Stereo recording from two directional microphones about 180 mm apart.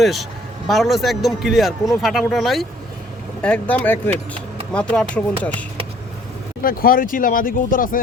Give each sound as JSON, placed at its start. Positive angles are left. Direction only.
{"t": 0.0, "sound": "speech", "side_deg": 0}
{"t": 6.6, "sound": "speech", "side_deg": 50}